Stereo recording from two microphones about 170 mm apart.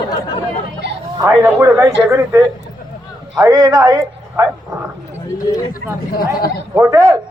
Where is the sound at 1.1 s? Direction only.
15° right (ahead or behind).